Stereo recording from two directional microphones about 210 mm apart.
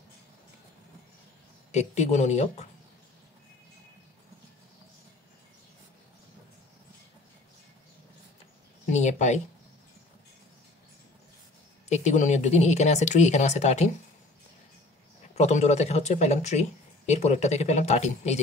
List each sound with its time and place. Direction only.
1.7 s speech: 35° left (ahead or behind)
8.9 s a sound: 35° left (ahead or behind)
11.9 s speech: 35° left (ahead or behind)
15.3 s speech: 30° left (ahead or behind)